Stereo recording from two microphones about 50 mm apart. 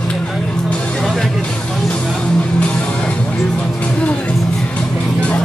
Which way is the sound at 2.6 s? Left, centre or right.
Left.